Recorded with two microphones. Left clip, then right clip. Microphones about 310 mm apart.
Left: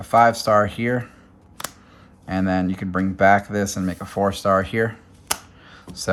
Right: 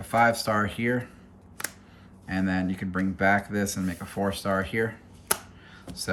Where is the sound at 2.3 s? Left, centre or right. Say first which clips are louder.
Left 6 dB; centre.